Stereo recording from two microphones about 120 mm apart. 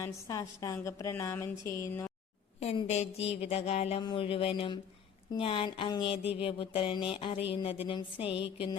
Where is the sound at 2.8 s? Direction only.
65° left (ahead or behind).